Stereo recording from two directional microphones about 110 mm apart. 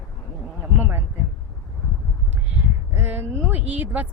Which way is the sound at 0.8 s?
15° right (ahead or behind).